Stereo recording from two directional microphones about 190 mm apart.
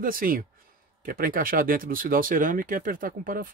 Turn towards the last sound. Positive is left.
turn(degrees=-45)  # may be behind; listen again after turning